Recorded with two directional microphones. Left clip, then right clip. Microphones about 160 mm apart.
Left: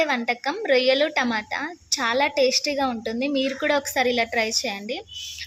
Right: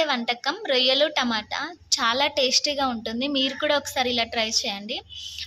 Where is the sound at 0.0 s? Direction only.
20° left (ahead or behind).